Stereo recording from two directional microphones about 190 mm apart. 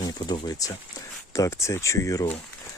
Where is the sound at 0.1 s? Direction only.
20° left (ahead or behind).